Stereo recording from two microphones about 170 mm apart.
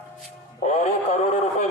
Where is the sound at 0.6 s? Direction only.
40° left (ahead or behind).